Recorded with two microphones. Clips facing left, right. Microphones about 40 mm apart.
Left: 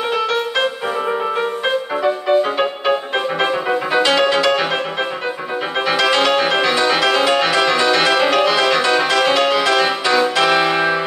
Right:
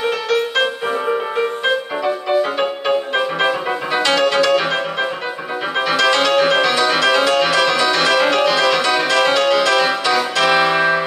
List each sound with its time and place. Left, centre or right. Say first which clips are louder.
2.0 s music: left 2 dB; centre
5.9 s music: even; centre